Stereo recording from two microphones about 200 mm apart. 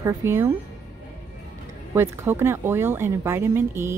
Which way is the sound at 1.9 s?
10° right (ahead or behind).